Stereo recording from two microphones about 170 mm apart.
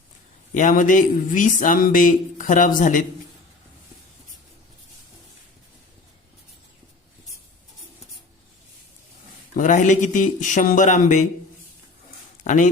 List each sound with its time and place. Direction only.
0.5 s speech: 50° left (ahead or behind)
9.6 s speech: 50° left (ahead or behind)
12.5 s speech: 45° left (ahead or behind)